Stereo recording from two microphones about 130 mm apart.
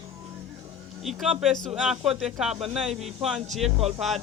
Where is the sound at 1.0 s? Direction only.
Centre (ahead or behind).